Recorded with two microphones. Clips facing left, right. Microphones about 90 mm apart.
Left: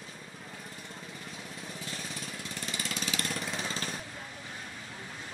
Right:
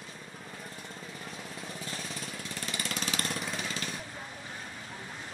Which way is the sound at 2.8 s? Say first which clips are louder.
Right 1 dB; 45° right (ahead or behind).